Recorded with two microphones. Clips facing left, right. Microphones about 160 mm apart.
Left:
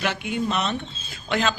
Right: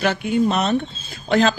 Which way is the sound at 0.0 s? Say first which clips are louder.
Right 7 dB; 40° right (ahead or behind).